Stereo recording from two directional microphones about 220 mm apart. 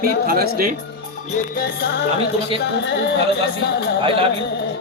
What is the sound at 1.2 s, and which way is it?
Speech, 40° left (ahead or behind).